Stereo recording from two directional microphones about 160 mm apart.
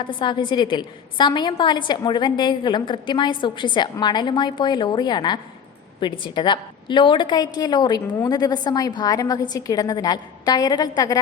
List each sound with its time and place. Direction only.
0.0 s a woman's voice: 30° left (ahead or behind)